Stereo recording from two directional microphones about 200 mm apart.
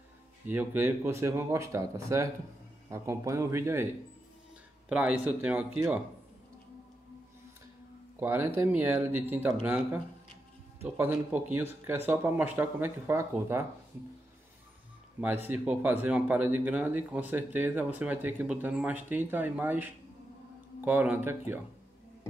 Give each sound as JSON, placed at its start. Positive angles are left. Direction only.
{"t": 0.5, "sound": "speech", "side_deg": -10}
{"t": 8.2, "sound": "speech", "side_deg": -10}
{"t": 10.8, "sound": "speech", "side_deg": -10}
{"t": 15.4, "sound": "speech", "side_deg": -10}